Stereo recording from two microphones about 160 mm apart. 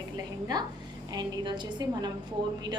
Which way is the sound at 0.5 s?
25° right (ahead or behind).